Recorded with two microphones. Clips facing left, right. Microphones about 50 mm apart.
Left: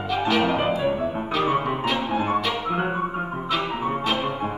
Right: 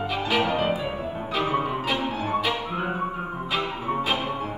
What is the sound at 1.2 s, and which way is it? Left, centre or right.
Music, centre.